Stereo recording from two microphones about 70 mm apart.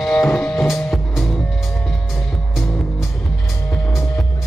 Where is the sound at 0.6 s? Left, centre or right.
Centre.